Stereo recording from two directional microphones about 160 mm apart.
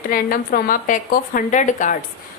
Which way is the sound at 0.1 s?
60° left (ahead or behind).